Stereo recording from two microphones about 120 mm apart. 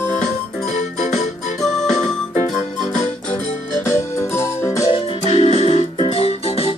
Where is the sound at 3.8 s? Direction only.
25° left (ahead or behind).